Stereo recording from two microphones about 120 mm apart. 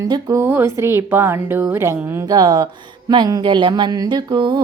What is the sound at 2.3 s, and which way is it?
Speech, 35° right (ahead or behind).